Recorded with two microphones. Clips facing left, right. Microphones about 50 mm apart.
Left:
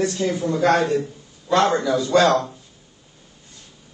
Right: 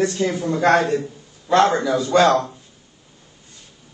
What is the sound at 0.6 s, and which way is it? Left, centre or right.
A man's voice, right.